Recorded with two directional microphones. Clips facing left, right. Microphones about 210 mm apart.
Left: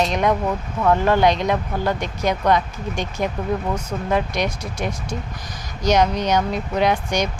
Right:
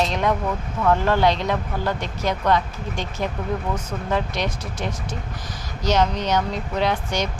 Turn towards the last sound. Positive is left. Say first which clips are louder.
# left 3 dB
turn(degrees=15)  # may be behind; listen again after turning